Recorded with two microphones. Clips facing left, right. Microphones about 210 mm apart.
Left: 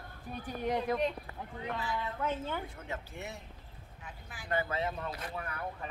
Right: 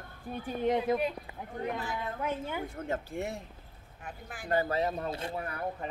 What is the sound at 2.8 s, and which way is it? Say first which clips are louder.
A woman's voice: right 8 dB; 45° right (ahead or behind).